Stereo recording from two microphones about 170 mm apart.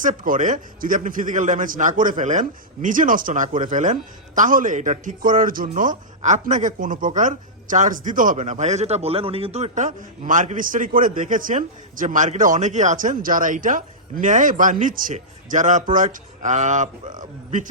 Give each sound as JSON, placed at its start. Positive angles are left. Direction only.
{"t": 0.0, "sound": "speech", "side_deg": -50}